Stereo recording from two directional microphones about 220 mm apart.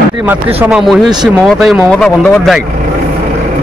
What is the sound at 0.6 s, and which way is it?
A man's voice, 5° right (ahead or behind).